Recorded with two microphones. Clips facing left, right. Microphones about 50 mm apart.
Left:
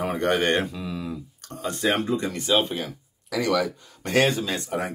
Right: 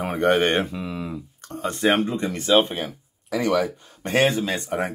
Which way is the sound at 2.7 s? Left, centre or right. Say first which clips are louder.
Right 1 dB; right.